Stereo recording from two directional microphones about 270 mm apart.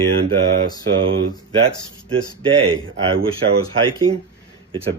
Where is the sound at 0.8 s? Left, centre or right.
Right.